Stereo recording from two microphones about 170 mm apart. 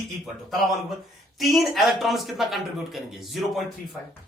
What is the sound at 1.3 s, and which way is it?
Speech, centre (ahead or behind).